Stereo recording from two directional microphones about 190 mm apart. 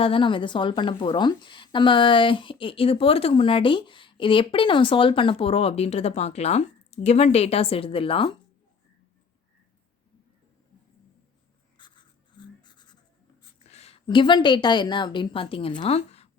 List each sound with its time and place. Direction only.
0.0 s a woman's voice: 25° left (ahead or behind)
11.8 s a sound: 25° left (ahead or behind)
13.7 s a woman's voice: 35° left (ahead or behind)